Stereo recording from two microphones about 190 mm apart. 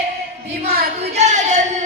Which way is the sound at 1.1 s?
40° right (ahead or behind).